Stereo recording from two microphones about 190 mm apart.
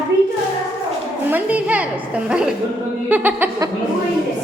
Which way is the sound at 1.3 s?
10° right (ahead or behind).